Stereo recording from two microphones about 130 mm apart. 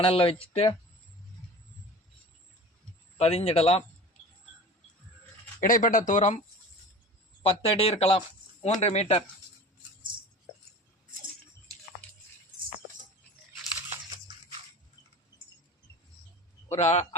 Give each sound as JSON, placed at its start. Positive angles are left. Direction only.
{"t": 0.0, "sound": "speech", "side_deg": 45}
{"t": 3.2, "sound": "speech", "side_deg": 55}
{"t": 5.5, "sound": "speech", "side_deg": 90}
{"t": 7.4, "sound": "speech", "side_deg": 45}
{"t": 16.6, "sound": "speech", "side_deg": 55}